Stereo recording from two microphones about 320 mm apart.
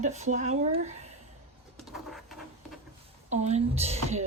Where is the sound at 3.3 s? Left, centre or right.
Right.